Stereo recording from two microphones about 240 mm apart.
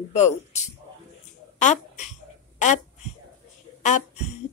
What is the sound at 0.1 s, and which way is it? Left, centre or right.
Speech, left.